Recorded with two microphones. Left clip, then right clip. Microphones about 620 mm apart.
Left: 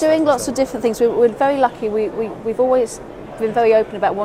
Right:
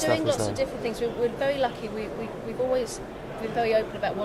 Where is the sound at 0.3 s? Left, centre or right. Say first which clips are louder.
Left 9 dB; left.